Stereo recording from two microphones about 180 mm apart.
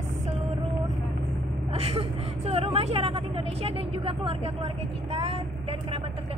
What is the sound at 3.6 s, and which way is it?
Speech, 30° right (ahead or behind).